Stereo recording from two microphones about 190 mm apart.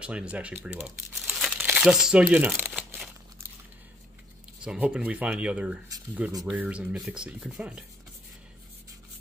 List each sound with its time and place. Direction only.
0.0 s speech: 5° right (ahead or behind)
4.6 s speech: 5° right (ahead or behind)